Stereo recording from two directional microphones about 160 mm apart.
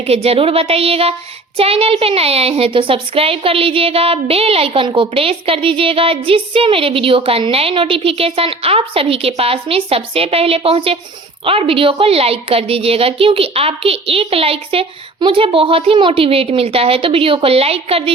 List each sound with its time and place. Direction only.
0.1 s a woman's voice: 40° right (ahead or behind)